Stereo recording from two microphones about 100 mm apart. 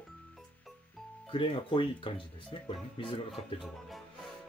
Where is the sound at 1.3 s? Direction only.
60° left (ahead or behind).